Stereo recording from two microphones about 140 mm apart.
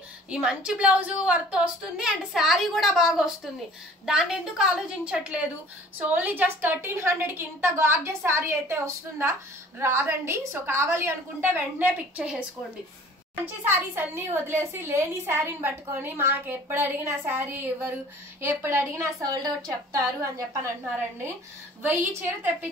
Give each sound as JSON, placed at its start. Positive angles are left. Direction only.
{"t": 0.3, "sound": "a woman's voice", "side_deg": -5}
{"t": 13.7, "sound": "a woman's voice", "side_deg": -15}